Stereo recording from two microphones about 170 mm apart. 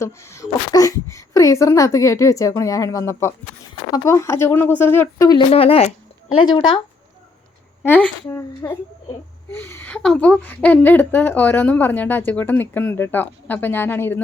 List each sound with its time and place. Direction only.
0.0 s a woman's voice: 15° left (ahead or behind)
5.5 s speech: 35° left (ahead or behind)
7.8 s a woman's voice: 10° left (ahead or behind)